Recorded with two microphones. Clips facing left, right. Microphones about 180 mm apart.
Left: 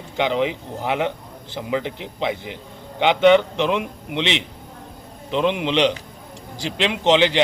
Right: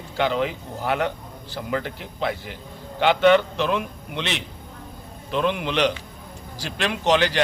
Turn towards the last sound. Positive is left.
turn(degrees=20)  # may be behind; listen again after turning